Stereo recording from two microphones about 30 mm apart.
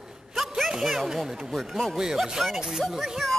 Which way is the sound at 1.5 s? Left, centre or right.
Centre.